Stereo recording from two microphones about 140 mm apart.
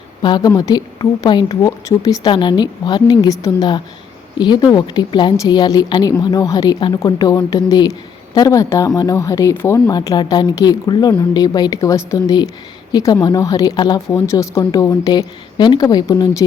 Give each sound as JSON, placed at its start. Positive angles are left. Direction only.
{"t": 0.2, "sound": "speech", "side_deg": 30}